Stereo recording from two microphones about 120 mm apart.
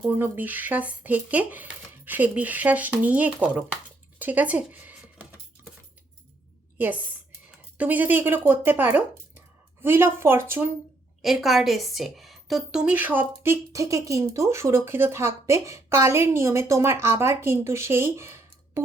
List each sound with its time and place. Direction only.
0.1 s speech: 15° right (ahead or behind)
4.2 s a sound: 15° right (ahead or behind)
6.8 s a woman's voice: 15° right (ahead or behind)
11.2 s a woman's voice: centre (ahead or behind); by 18.8 s 20° right (ahead or behind)